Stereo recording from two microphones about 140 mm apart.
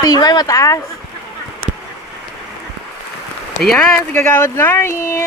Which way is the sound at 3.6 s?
5° left (ahead or behind).